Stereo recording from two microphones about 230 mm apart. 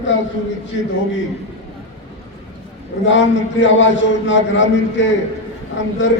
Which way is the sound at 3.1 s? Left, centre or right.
Left.